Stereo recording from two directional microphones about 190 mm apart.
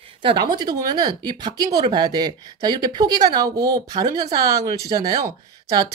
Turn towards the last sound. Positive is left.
turn(degrees=-20)  # may be behind; listen again after turning